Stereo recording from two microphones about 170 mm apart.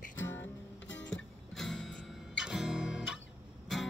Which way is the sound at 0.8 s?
90° left.